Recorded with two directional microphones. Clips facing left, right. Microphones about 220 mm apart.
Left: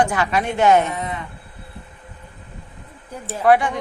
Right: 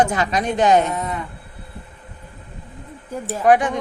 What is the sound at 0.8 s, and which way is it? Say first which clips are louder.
Speech: right 1 dB; 40° right (ahead or behind).